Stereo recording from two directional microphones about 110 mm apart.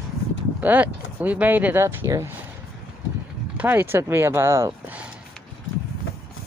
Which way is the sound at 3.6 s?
20° right (ahead or behind).